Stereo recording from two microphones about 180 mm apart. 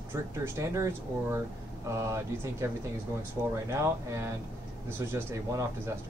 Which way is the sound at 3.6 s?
15° right (ahead or behind).